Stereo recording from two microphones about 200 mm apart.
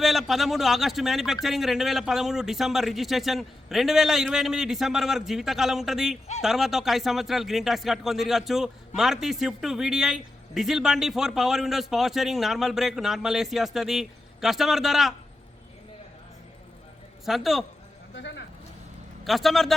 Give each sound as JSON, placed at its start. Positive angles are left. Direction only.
{"t": 0.0, "sound": "speech", "side_deg": 0}
{"t": 17.2, "sound": "speech", "side_deg": 0}
{"t": 18.1, "sound": "a sound", "side_deg": 65}
{"t": 19.2, "sound": "speech", "side_deg": 0}